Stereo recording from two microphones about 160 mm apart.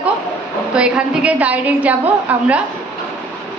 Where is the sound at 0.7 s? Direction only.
5° right (ahead or behind).